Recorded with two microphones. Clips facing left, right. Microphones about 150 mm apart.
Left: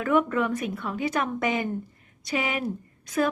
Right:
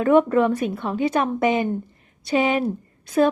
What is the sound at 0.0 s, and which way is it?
A woman's voice, 30° right (ahead or behind).